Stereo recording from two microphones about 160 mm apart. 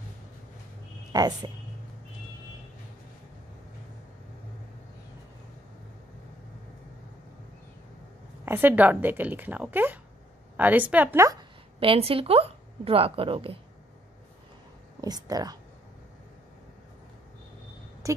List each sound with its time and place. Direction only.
1.1 s speech: 25° right (ahead or behind)
8.5 s a woman's voice: 10° right (ahead or behind)
11.8 s speech: 35° right (ahead or behind)
15.0 s speech: 25° right (ahead or behind)
18.0 s a sound: 20° right (ahead or behind)